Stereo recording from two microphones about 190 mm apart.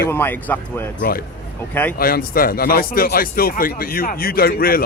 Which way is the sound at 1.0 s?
50° left (ahead or behind).